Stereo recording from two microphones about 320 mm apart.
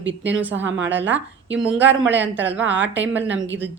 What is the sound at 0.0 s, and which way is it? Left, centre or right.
A woman's voice, right.